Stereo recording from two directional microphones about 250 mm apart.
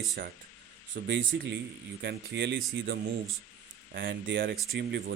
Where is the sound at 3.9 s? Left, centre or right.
Right.